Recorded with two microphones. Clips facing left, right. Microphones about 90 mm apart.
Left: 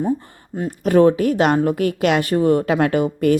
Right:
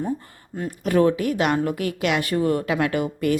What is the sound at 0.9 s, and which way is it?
A woman's voice, 35° left (ahead or behind).